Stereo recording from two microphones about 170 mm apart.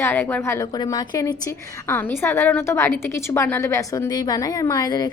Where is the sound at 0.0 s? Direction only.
10° left (ahead or behind).